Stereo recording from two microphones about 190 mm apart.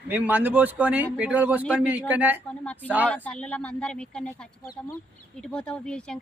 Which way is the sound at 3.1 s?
5° left (ahead or behind).